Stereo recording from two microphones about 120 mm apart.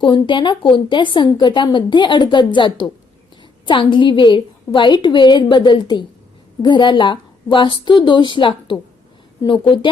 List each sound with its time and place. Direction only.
0.0 s a woman's voice: 40° left (ahead or behind)